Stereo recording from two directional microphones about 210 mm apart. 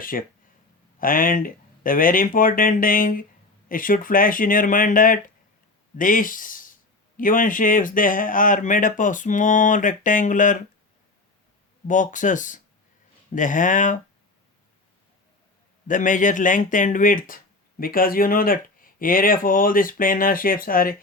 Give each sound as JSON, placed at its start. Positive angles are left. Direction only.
{"t": 0.0, "sound": "speech", "side_deg": 40}
{"t": 11.9, "sound": "speech", "side_deg": 35}
{"t": 15.9, "sound": "speech", "side_deg": 40}